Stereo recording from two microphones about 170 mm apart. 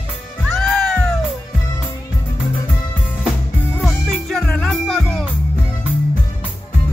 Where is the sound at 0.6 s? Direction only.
5° left (ahead or behind).